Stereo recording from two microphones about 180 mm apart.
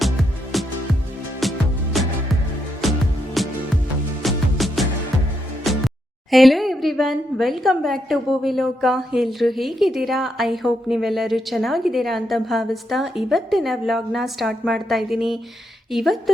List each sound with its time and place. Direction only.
0.0 s music: centre (ahead or behind)
6.3 s a woman's voice: centre (ahead or behind)